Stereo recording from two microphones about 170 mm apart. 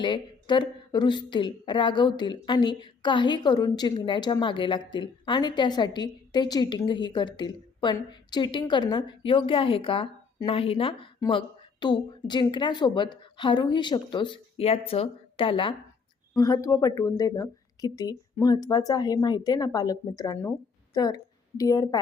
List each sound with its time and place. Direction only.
0.0 s a woman's voice: 25° left (ahead or behind)
16.3 s a woman's voice: 20° left (ahead or behind)